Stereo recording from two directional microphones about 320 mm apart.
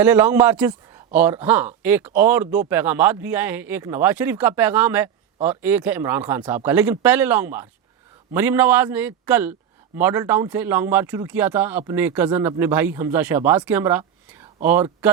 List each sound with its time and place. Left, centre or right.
0.0 s a man's voice: centre